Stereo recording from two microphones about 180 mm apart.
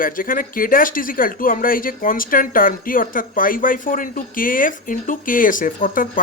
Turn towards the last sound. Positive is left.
turn(degrees=50)  # may be behind; listen again after turning